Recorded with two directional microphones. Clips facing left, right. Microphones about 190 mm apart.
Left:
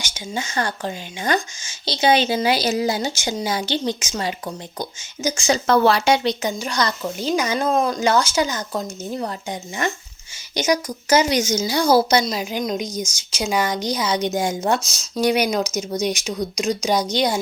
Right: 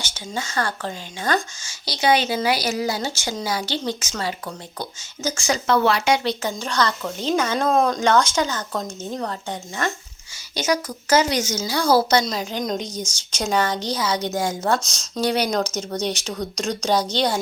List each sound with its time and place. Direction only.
0.0 s a woman's voice: 15° left (ahead or behind)
5.6 s speech: 40° left (ahead or behind)
6.2 s a woman's voice: 15° left (ahead or behind)
14.8 s a woman's voice: 5° left (ahead or behind)